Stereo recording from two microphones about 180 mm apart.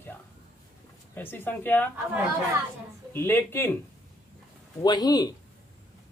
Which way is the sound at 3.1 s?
15° left (ahead or behind).